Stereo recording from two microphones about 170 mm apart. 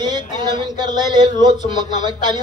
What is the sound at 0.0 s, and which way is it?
Speech, 25° right (ahead or behind).